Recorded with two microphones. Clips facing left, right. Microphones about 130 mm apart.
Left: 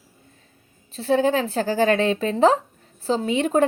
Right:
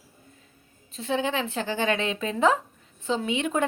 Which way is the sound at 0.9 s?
40° left (ahead or behind).